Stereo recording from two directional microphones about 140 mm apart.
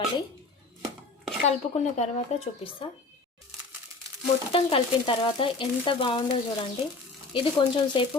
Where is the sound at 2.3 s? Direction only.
55° left (ahead or behind).